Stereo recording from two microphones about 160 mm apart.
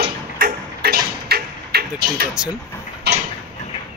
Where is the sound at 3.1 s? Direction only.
90° right.